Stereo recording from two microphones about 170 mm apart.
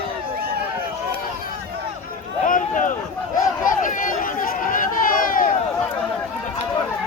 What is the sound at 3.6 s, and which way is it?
Run, 50° left (ahead or behind).